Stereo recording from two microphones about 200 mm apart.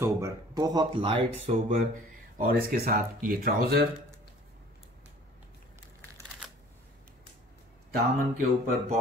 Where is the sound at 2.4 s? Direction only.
45° right (ahead or behind).